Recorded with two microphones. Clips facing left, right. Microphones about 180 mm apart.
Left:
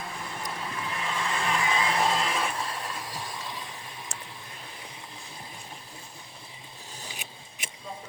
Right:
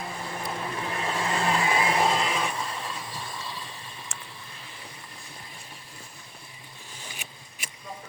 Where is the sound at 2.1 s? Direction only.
Centre (ahead or behind).